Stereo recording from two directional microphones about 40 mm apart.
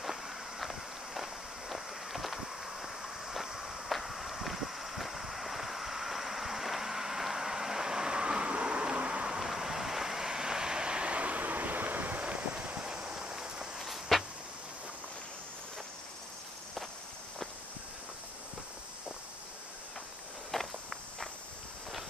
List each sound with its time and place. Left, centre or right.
0.0 s walk: centre
3.9 s a sound: centre; by 9.2 s right
9.4 s waves: centre; by 12.3 s right
12.3 s a sound: right
13.7 s walk: centre
20.5 s walk: centre